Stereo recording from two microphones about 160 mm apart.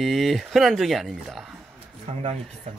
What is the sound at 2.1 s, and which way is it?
Speech, 45° right (ahead or behind).